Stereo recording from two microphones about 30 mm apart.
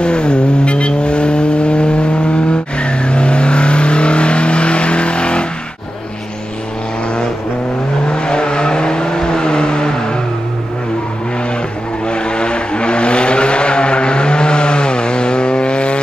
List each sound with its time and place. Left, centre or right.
0.0 s vehicle: left
8.1 s vehicle: left
12.1 s vehicle: left